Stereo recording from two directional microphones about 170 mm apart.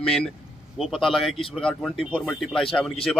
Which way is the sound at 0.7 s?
Centre (ahead or behind).